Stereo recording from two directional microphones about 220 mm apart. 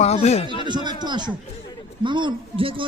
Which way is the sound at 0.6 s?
20° right (ahead or behind).